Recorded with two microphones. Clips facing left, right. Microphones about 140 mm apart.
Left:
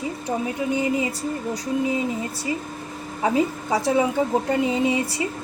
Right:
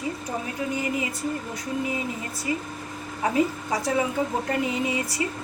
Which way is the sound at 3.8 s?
30° left (ahead or behind).